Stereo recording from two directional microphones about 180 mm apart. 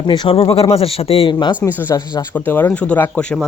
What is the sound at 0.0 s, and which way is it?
Speech, 25° left (ahead or behind).